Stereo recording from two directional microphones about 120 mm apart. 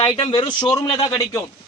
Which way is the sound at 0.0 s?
45° left (ahead or behind).